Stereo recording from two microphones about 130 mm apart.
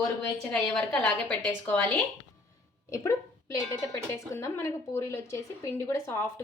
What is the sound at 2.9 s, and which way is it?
Speech, 25° left (ahead or behind).